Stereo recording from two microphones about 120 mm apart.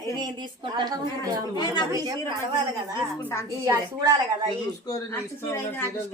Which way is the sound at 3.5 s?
30° right (ahead or behind).